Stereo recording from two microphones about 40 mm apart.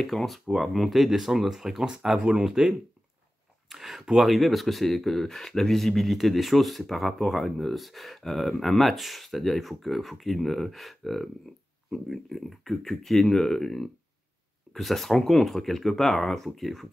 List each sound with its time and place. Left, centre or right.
0.0 s speech: centre
2.1 s speech: right
2.4 s speech: centre